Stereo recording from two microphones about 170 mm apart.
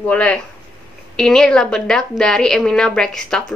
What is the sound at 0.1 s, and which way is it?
A woman's voice, 5° left (ahead or behind).